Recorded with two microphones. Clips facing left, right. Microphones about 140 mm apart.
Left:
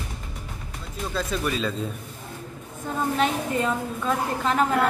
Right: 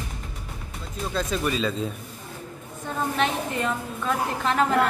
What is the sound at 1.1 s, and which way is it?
Speech, centre (ahead or behind).